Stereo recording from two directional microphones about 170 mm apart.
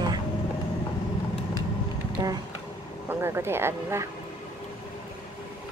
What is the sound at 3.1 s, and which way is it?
Speech, 15° right (ahead or behind).